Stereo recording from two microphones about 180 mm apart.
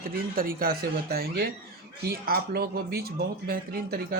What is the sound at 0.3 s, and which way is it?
Speech, 55° right (ahead or behind).